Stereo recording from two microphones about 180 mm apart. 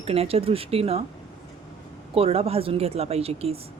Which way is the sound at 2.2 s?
35° right (ahead or behind).